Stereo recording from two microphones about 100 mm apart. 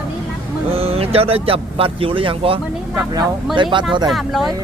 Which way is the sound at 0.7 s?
80° right.